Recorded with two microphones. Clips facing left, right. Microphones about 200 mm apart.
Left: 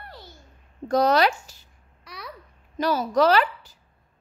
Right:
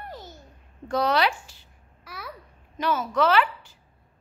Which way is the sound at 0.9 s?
40° left (ahead or behind).